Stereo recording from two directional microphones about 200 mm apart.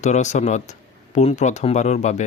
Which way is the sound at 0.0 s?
35° left (ahead or behind).